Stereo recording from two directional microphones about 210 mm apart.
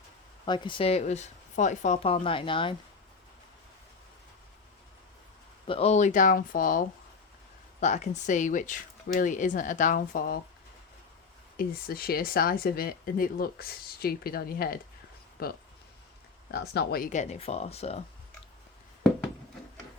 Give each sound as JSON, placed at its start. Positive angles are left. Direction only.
{"t": 0.4, "sound": "speech", "side_deg": 20}
{"t": 5.6, "sound": "speech", "side_deg": 30}
{"t": 11.5, "sound": "speech", "side_deg": 45}